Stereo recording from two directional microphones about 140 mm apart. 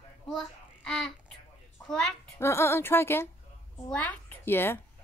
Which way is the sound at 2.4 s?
20° left (ahead or behind).